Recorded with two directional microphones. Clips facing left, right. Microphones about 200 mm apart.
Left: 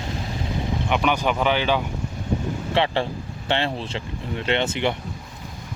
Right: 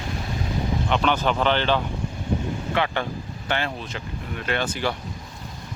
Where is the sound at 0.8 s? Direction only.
10° left (ahead or behind).